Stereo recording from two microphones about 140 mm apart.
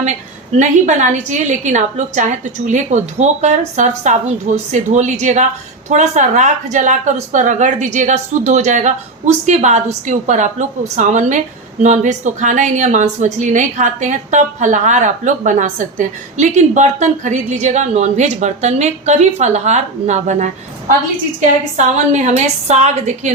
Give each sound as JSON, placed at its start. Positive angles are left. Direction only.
{"t": 0.6, "sound": "a woman's voice", "side_deg": -60}